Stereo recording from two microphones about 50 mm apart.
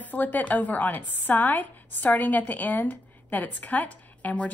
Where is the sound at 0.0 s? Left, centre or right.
Left.